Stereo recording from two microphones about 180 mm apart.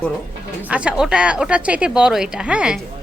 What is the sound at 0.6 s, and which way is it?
Speech, 5° right (ahead or behind).